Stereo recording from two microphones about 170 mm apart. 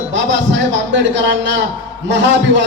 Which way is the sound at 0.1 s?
90° right.